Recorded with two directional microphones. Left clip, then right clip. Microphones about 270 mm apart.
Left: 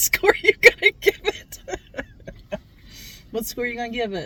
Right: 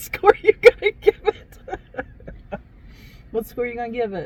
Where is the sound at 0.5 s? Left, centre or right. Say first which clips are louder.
Right 1 dB; left.